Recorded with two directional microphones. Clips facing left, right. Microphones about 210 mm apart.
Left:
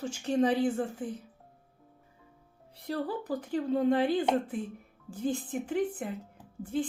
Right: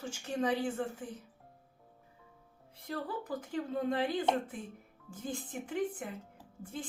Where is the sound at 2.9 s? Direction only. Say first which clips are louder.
Left 5 dB; 35° left (ahead or behind).